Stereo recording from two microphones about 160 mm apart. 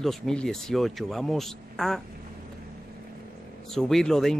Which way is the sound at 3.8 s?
5° left (ahead or behind).